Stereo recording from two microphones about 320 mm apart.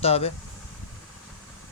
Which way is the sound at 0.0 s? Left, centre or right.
Centre.